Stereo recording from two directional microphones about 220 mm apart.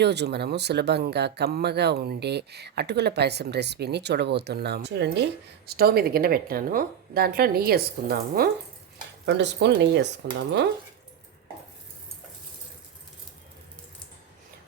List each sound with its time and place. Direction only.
0.0 s speech: 50° right (ahead or behind)